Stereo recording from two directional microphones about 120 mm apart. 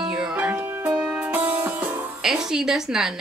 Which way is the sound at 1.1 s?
15° right (ahead or behind).